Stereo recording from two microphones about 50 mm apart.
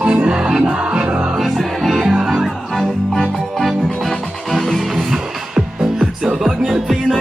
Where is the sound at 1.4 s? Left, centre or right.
Centre.